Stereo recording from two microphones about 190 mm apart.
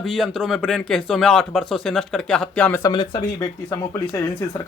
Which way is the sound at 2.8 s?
25° left (ahead or behind).